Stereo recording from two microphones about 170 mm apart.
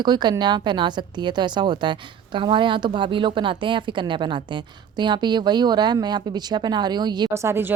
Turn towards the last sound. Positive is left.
turn(degrees=-15)  # may be behind; listen again after turning